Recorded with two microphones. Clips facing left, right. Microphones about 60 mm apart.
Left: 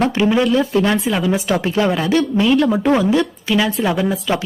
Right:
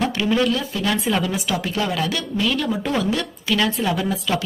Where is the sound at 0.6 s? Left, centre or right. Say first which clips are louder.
Left 7 dB; left.